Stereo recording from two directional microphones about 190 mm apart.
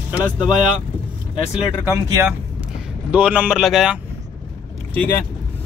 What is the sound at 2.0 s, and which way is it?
Speech, 15° right (ahead or behind).